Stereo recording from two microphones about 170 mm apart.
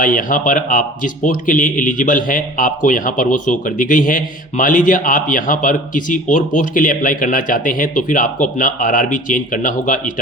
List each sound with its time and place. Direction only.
0.0 s a man's voice: 50° left (ahead or behind)